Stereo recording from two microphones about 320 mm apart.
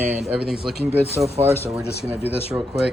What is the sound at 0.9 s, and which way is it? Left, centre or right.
Speech, centre.